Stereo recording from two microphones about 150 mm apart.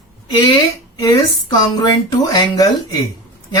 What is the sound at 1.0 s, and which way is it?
Speech, 30° left (ahead or behind).